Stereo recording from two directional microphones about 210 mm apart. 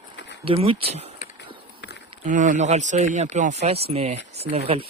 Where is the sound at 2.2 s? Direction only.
35° right (ahead or behind).